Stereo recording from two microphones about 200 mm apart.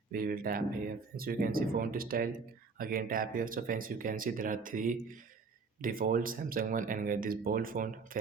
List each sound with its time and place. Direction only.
0.1 s speech: 45° right (ahead or behind)